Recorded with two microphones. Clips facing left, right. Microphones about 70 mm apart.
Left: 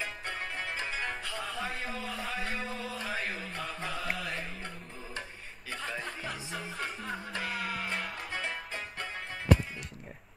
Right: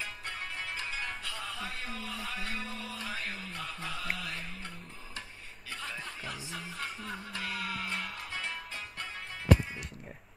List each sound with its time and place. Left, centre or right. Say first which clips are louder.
0.6 s music: left 3 dB; left
6.2 s music: left 3 dB; left